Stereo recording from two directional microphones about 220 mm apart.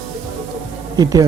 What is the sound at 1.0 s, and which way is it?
Speech, 15° right (ahead or behind).